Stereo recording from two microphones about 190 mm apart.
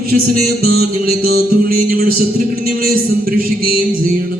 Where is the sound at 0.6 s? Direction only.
50° right (ahead or behind).